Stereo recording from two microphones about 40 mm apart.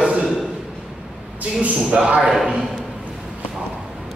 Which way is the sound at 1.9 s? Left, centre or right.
Right.